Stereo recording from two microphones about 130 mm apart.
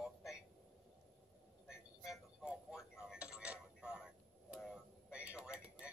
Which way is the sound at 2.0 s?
5° right (ahead or behind).